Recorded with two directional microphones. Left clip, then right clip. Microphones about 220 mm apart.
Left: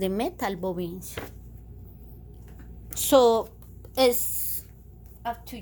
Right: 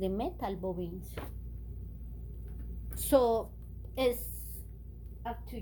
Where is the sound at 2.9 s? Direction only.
35° left (ahead or behind).